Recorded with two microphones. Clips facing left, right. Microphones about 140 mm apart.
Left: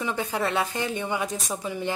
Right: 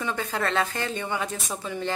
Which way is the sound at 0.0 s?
15° left (ahead or behind).